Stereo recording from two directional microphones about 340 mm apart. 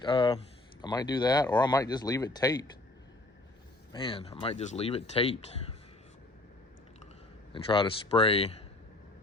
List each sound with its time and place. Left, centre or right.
0.0 s speech: centre
3.9 s speech: centre
7.5 s speech: centre